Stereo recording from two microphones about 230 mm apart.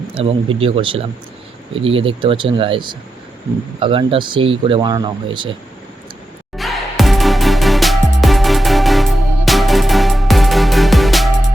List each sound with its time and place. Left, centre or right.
0.1 s speech: right
6.6 s music: centre